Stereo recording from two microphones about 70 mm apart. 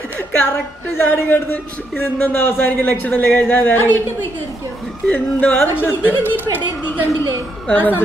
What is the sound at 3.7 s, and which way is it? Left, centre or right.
Speech, left.